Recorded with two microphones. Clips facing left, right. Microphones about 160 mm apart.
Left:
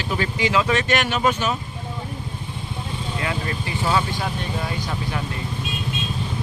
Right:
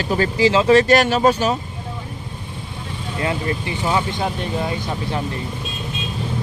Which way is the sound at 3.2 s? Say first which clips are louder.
Right 6 dB; 25° right (ahead or behind).